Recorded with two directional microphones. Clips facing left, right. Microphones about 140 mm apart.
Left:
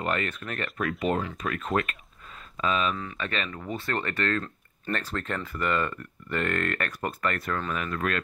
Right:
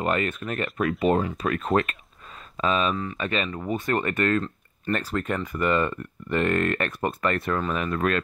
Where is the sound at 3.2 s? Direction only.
15° right (ahead or behind).